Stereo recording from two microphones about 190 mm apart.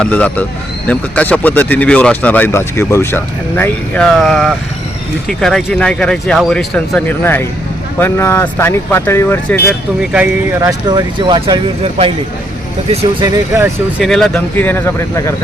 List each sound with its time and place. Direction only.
0.0 s speech: 5° left (ahead or behind)
10.0 s speech: 5° right (ahead or behind)
10.6 s speech: 20° right (ahead or behind)
13.2 s speech: 15° right (ahead or behind)
14.0 s speech: centre (ahead or behind)